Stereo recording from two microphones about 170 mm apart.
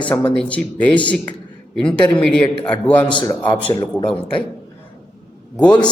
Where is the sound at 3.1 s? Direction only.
20° left (ahead or behind).